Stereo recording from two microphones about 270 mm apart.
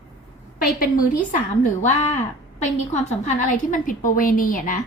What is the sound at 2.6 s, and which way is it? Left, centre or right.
A woman's voice, left.